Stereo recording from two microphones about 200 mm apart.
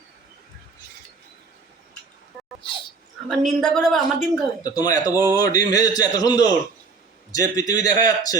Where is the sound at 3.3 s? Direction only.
Centre (ahead or behind).